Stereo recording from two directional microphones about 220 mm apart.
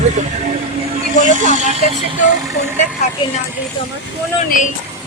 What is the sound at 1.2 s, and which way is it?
Speech, 35° right (ahead or behind).